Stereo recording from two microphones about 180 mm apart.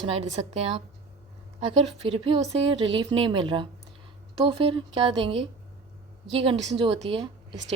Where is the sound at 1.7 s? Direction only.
30° right (ahead or behind).